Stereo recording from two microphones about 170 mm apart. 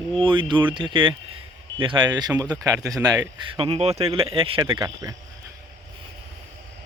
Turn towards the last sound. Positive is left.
turn(degrees=-25)  # may be behind; listen again after turning